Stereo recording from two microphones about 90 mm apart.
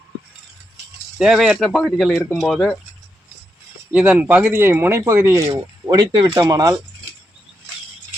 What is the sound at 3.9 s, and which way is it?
Speech, 15° right (ahead or behind).